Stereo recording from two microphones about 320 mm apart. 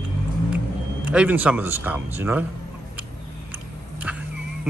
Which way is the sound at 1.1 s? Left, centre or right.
Centre.